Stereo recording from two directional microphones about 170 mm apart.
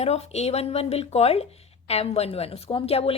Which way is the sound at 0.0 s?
40° left (ahead or behind).